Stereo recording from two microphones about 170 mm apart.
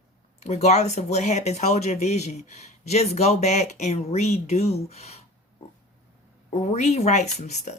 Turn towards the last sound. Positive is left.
turn(degrees=40)  # may be behind; listen again after turning